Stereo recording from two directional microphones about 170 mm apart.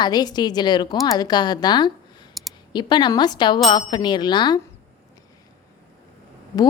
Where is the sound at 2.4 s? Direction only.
Centre (ahead or behind).